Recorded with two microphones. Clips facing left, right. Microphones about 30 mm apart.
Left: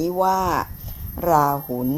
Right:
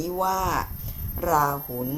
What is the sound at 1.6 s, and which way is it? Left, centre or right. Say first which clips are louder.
Speech: left 6 dB; left.